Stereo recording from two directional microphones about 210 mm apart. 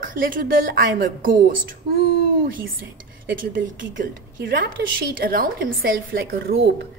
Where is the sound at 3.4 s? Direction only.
40° right (ahead or behind).